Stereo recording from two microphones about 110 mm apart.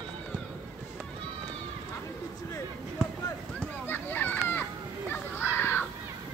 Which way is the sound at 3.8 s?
15° left (ahead or behind).